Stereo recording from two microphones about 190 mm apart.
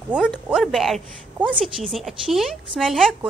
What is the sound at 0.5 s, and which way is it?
A woman's voice, centre (ahead or behind).